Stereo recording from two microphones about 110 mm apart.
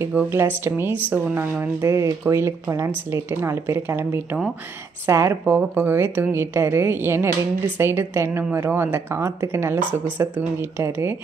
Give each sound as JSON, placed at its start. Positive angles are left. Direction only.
{"t": 0.3, "sound": "a woman's voice", "side_deg": -20}